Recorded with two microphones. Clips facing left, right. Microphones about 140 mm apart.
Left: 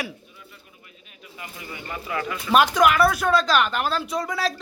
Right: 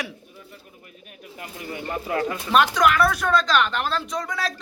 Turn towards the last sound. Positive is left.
turn(degrees=5)  # may be behind; listen again after turning